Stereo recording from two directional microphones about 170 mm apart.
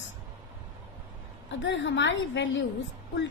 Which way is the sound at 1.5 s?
90° left.